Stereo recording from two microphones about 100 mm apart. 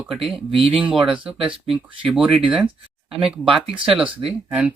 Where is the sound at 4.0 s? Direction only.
10° right (ahead or behind).